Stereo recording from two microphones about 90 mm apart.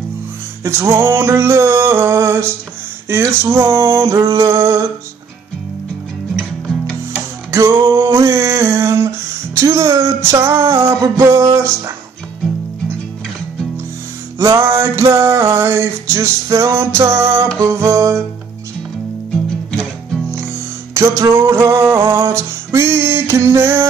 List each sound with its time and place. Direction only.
0.7 s music: 30° right (ahead or behind)
7.5 s a sound: 40° right (ahead or behind)
9.6 s music: 35° right (ahead or behind)
10.4 s music: 30° right (ahead or behind)
14.4 s music: 35° right (ahead or behind)
19.7 s music: 5° left (ahead or behind)
20.9 s music: 35° right (ahead or behind)